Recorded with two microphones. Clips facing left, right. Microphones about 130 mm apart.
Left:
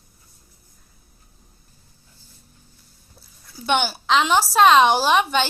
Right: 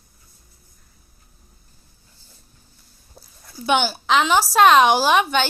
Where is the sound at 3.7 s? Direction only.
5° right (ahead or behind).